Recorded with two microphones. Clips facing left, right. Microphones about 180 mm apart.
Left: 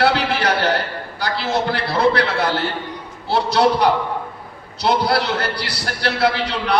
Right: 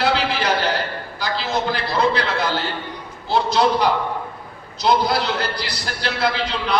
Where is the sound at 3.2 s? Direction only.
65° left (ahead or behind).